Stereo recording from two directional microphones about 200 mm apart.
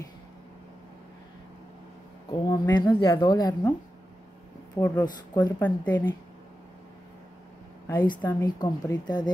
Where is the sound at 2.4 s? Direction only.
20° left (ahead or behind).